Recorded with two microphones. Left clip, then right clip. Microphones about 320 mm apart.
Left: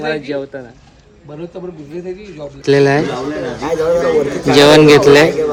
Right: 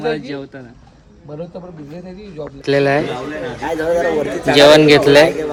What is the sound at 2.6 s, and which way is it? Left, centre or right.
Speech, centre.